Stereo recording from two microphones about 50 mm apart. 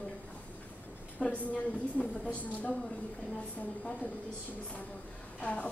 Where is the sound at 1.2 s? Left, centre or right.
Left.